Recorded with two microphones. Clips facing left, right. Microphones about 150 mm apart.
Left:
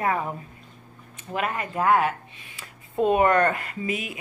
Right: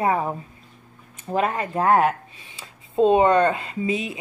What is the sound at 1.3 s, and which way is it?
Speech, 30° right (ahead or behind).